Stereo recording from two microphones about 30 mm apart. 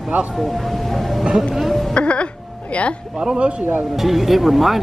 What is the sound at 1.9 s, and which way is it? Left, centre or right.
Music, left.